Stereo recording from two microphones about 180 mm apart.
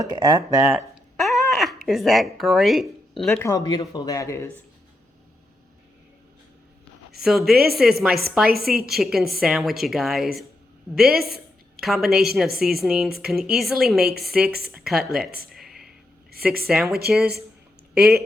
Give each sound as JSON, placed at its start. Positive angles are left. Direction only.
{"t": 0.0, "sound": "speech", "side_deg": -20}
{"t": 1.1, "sound": "a sound", "side_deg": 0}
{"t": 3.4, "sound": "speech", "side_deg": 20}
{"t": 7.2, "sound": "a woman's voice", "side_deg": 0}
{"t": 15.4, "sound": "a sound", "side_deg": 0}
{"t": 16.6, "sound": "a woman's voice", "side_deg": -5}